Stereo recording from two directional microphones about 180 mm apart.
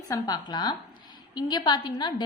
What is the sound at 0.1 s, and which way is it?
A woman's voice, 20° left (ahead or behind).